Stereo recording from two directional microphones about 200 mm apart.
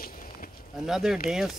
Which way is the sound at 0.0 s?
45° left (ahead or behind).